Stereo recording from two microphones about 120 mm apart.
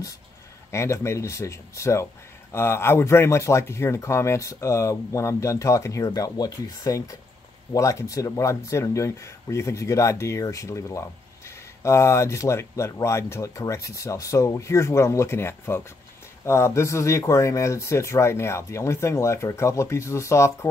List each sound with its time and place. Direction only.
0.7 s speech: 25° left (ahead or behind)